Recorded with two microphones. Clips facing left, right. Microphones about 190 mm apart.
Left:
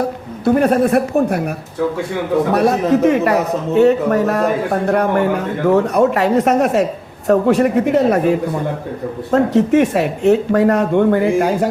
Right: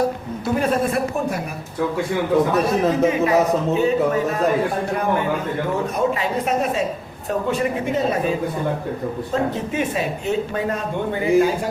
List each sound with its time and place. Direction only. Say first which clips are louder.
0.4 s speech: left 7 dB; 60° left (ahead or behind)
2.5 s speech: left 5 dB; 70° left (ahead or behind)